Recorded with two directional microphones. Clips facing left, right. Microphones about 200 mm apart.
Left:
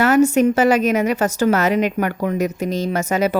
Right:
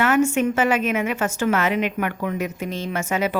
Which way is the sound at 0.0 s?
40° left (ahead or behind).